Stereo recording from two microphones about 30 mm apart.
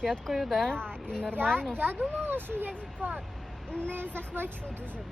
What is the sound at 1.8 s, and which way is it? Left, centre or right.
Speech, right.